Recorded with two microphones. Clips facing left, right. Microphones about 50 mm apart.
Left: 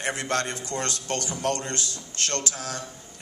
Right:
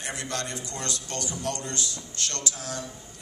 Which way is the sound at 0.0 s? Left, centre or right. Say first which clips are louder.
Left 6 dB; left.